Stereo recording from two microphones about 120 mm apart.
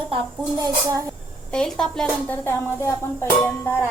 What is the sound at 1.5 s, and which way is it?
A woman's voice, 5° left (ahead or behind).